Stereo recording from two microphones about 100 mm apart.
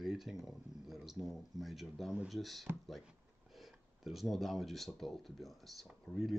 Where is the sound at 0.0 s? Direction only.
5° right (ahead or behind).